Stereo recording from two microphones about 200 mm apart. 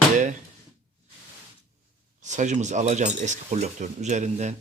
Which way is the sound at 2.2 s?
35° right (ahead or behind).